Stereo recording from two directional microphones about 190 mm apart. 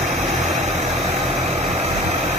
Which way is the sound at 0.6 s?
35° right (ahead or behind).